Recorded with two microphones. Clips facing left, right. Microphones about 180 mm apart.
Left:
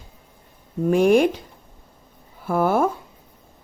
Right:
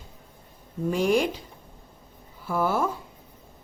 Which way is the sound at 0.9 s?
55° left (ahead or behind).